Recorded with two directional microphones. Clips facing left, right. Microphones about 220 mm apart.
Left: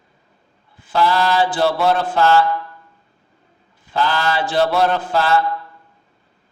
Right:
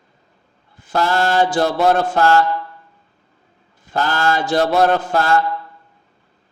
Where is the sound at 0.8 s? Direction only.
45° right (ahead or behind).